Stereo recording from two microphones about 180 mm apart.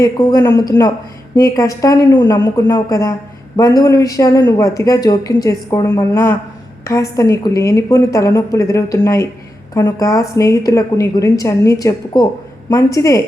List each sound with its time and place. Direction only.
0.0 s a woman's voice: 20° left (ahead or behind)